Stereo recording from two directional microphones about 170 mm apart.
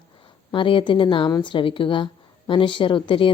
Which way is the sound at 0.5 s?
30° left (ahead or behind).